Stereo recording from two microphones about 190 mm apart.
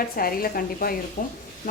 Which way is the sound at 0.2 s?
50° left (ahead or behind).